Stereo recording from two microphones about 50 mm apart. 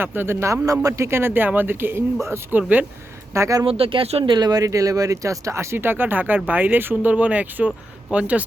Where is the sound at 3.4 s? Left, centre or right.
Right.